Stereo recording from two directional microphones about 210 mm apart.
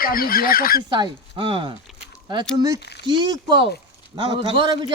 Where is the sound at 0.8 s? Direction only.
20° right (ahead or behind).